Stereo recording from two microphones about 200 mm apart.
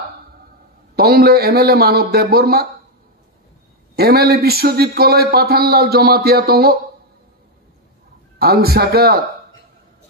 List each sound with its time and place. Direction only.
0.9 s a man's voice: 50° right (ahead or behind)
3.9 s a man's voice: 50° right (ahead or behind)
8.4 s a man's voice: 50° right (ahead or behind)